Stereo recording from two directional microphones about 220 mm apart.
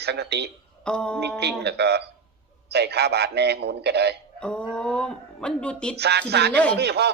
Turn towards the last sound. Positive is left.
turn(degrees=-50)  # may be behind; listen again after turning